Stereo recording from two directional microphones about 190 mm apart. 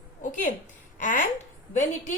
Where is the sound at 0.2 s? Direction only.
45° left (ahead or behind).